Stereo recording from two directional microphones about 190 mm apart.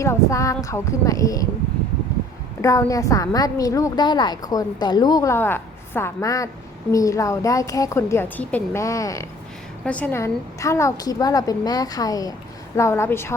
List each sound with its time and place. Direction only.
0.0 s a woman's voice: 15° left (ahead or behind)
2.6 s a woman's voice: 15° left (ahead or behind)